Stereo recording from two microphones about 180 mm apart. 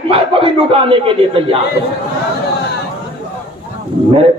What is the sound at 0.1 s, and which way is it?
A man's voice, 30° right (ahead or behind).